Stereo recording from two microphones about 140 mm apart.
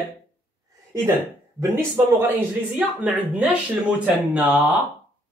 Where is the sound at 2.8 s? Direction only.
10° right (ahead or behind).